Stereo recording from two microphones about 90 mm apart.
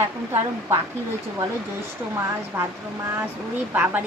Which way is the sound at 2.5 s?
20° right (ahead or behind).